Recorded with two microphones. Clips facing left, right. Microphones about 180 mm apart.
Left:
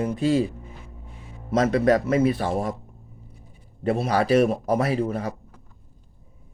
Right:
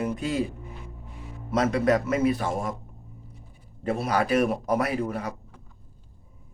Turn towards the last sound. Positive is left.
turn(degrees=30)  # may be behind; listen again after turning